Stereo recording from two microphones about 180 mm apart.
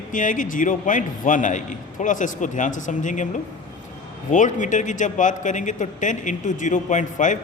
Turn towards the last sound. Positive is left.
turn(degrees=45)  # may be behind; listen again after turning